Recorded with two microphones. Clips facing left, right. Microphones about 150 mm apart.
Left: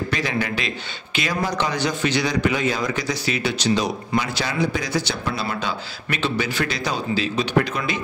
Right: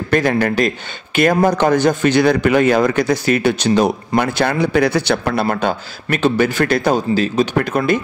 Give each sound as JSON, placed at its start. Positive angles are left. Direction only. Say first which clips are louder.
{"t": 0.1, "sound": "a man's voice", "louder": "right 9 dB", "side_deg": -50}